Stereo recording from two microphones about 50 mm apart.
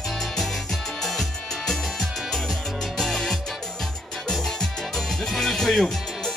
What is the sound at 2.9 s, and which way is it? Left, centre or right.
Music, centre.